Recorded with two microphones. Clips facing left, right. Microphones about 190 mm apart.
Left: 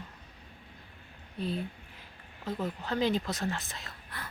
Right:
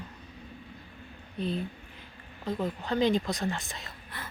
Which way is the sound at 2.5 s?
5° left (ahead or behind).